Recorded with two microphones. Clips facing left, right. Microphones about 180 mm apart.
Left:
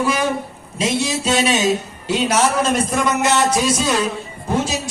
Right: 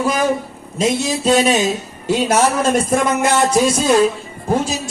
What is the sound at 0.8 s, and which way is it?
Speech, 45° right (ahead or behind).